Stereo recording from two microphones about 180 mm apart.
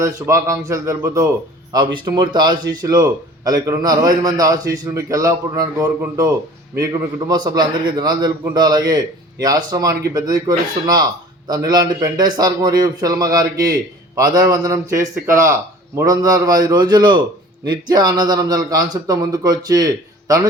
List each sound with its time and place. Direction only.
0.0 s a man's voice: 15° right (ahead or behind)